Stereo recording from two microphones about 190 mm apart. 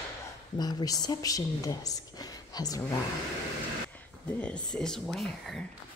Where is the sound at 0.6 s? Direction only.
20° left (ahead or behind).